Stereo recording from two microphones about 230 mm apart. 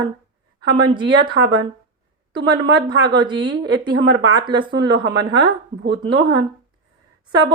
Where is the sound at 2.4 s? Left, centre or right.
Right.